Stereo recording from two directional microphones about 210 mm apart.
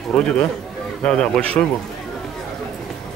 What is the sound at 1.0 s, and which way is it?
Speech, 5° left (ahead or behind).